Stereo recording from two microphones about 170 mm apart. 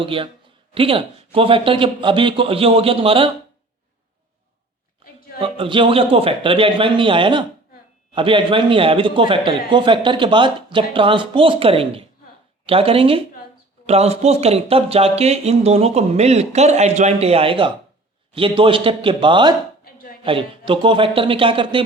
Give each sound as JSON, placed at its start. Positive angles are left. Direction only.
{"t": 0.0, "sound": "speech", "side_deg": -30}
{"t": 5.4, "sound": "a man's voice", "side_deg": -30}